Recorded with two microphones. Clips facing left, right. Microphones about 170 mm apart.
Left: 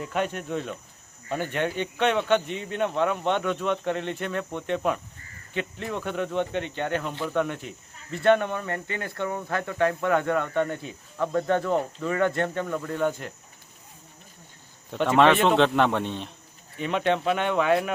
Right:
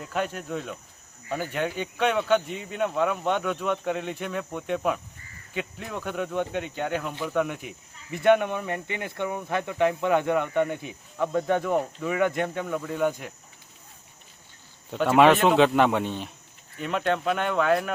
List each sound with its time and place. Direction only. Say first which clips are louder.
0.0 s speech: left 2 dB; centre (ahead or behind)
14.8 s speech: right 1 dB; 5° right (ahead or behind)